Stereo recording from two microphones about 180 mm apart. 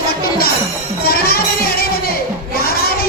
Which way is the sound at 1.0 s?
60° left (ahead or behind).